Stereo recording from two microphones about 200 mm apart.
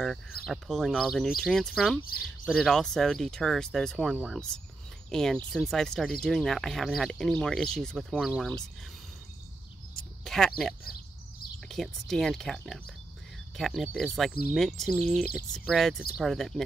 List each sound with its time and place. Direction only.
0.0 s speech: centre (ahead or behind)
10.2 s speech: centre (ahead or behind)
10.8 s a sound: 50° left (ahead or behind)
11.7 s speech: centre (ahead or behind)